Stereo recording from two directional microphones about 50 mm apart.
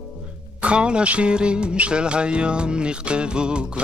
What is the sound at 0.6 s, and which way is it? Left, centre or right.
Music, right.